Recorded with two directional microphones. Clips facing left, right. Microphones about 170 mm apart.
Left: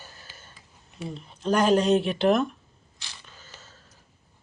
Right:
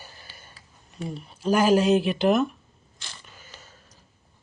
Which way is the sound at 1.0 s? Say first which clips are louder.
Right 2 dB; 5° right (ahead or behind).